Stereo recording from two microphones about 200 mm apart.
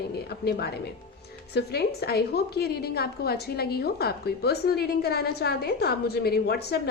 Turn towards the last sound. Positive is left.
turn(degrees=55)  # may be behind; listen again after turning